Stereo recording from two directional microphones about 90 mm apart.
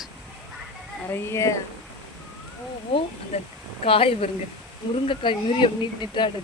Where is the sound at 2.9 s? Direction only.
85° left.